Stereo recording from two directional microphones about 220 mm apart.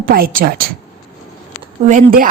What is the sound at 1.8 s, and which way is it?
Speech, 35° right (ahead or behind).